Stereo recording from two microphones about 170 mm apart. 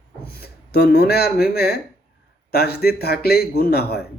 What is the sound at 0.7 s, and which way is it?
A man's voice, 65° left (ahead or behind).